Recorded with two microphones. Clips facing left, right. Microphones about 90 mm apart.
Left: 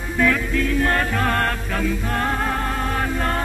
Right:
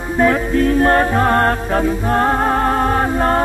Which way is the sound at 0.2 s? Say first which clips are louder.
Right 6 dB; 35° right (ahead or behind).